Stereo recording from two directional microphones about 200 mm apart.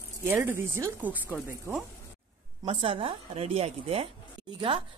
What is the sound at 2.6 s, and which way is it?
A woman's voice, 30° right (ahead or behind).